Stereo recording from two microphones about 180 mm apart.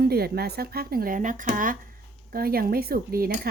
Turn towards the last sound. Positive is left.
turn(degrees=-55)  # may be behind; listen again after turning